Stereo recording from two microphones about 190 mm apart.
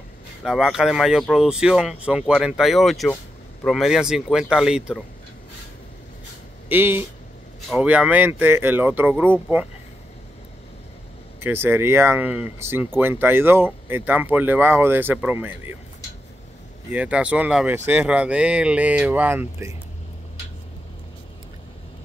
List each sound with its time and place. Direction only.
0.4 s speech: centre (ahead or behind)
6.7 s speech: 10° right (ahead or behind)
11.3 s speech: 10° right (ahead or behind)
16.9 s speech: 5° right (ahead or behind)